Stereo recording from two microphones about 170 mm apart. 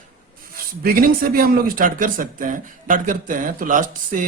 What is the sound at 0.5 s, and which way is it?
Speech, 60° right (ahead or behind).